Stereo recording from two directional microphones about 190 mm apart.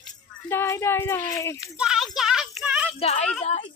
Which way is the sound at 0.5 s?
15° left (ahead or behind).